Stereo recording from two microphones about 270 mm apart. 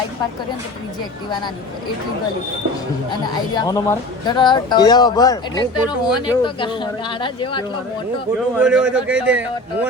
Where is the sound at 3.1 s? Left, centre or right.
Centre.